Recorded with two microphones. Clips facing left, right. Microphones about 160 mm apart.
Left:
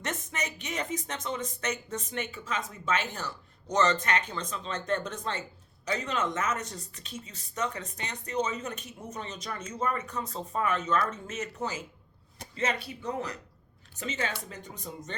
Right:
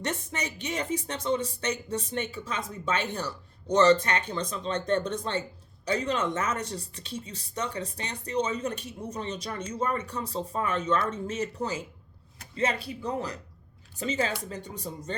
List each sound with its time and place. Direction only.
0.0 s speech: 35° right (ahead or behind)